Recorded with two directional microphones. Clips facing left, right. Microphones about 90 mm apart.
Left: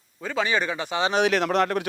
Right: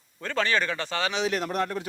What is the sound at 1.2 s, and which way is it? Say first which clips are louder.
Speech: left 6 dB; 90° left.